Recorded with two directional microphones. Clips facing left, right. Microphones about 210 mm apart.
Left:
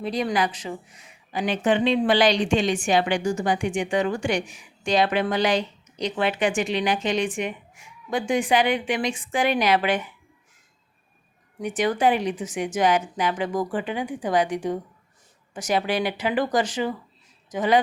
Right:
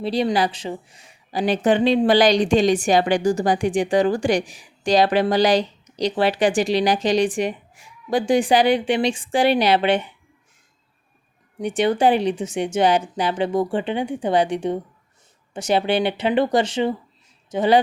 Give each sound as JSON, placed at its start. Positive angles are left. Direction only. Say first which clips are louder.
{"t": 0.0, "sound": "a woman's voice", "louder": "right 4 dB", "side_deg": -30}
{"t": 11.6, "sound": "speech", "louder": "right 4 dB", "side_deg": -30}